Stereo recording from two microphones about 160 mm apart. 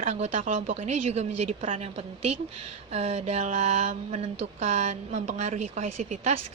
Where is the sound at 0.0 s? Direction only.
45° right (ahead or behind).